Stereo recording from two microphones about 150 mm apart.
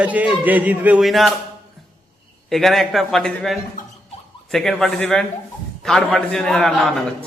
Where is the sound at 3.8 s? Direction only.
60° left (ahead or behind).